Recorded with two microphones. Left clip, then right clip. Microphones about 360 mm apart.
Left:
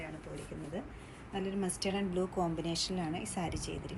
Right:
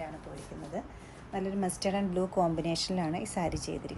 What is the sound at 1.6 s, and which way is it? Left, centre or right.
Speech, right.